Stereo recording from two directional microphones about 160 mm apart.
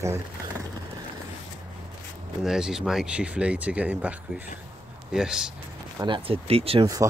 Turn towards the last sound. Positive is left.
turn(degrees=-20)  # may be behind; listen again after turning